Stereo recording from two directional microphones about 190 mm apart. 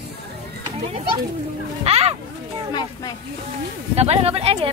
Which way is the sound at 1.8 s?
35° right (ahead or behind).